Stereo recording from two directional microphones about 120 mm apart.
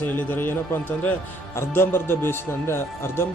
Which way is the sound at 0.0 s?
15° left (ahead or behind).